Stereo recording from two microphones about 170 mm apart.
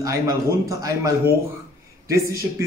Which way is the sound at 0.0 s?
20° right (ahead or behind).